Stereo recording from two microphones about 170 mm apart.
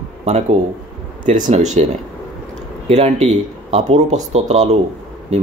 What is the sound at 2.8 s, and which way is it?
Speech, 40° right (ahead or behind).